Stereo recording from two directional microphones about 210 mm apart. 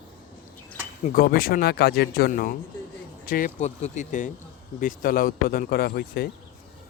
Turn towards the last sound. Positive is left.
turn(degrees=45)  # may be behind; listen again after turning